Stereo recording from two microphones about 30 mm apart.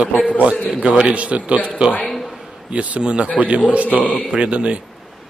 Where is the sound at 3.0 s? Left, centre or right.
Right.